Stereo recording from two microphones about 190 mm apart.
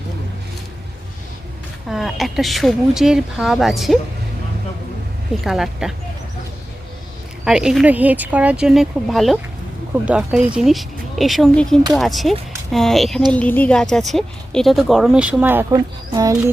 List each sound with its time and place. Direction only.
1.9 s a woman's voice: centre (ahead or behind)
5.4 s a woman's voice: centre (ahead or behind)
7.4 s a woman's voice: 5° right (ahead or behind)